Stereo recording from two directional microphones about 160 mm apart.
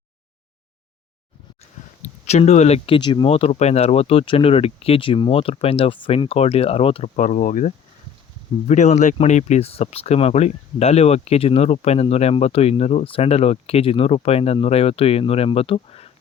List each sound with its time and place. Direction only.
2.2 s speech: 45° left (ahead or behind)
7.2 s speech: 50° left (ahead or behind)